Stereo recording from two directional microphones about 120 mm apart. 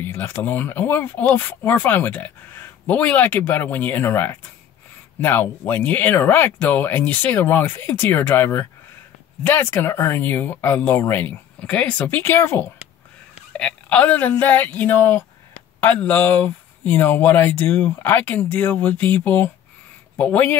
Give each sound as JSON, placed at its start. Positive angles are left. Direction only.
{"t": 0.0, "sound": "speech", "side_deg": 15}